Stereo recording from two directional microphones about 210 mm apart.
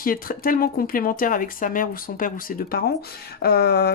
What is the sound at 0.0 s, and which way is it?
Speech, 45° left (ahead or behind).